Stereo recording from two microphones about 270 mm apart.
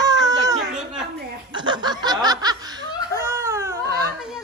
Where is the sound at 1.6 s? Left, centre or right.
Centre.